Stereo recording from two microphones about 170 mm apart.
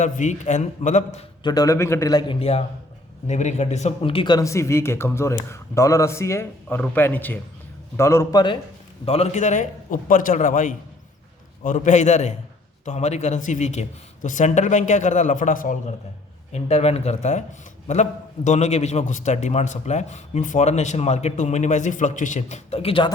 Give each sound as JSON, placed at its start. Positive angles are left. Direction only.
{"t": 0.0, "sound": "a man's voice", "side_deg": 45}
{"t": 1.5, "sound": "a man's voice", "side_deg": 20}
{"t": 9.0, "sound": "a man's voice", "side_deg": 40}